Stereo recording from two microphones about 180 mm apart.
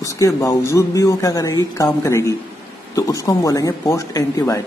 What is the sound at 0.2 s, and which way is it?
Speech, 20° left (ahead or behind).